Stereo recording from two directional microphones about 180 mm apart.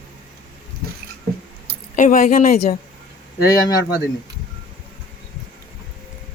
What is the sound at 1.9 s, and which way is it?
Speech, 45° left (ahead or behind).